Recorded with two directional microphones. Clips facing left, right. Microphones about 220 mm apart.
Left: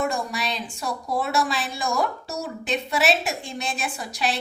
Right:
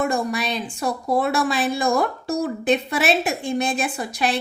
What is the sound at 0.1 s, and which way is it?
A woman's voice, 55° right (ahead or behind).